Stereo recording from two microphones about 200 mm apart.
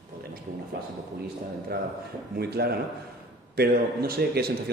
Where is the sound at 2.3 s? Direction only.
50° right (ahead or behind).